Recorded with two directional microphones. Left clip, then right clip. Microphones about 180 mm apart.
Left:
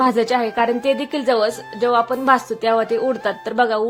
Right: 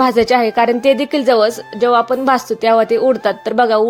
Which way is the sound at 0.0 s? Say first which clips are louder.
Right 5 dB; 30° right (ahead or behind).